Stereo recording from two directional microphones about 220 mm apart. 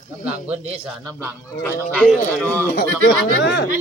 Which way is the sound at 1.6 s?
10° left (ahead or behind).